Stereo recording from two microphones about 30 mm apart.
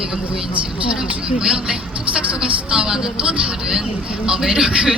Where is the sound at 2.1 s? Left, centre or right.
Right.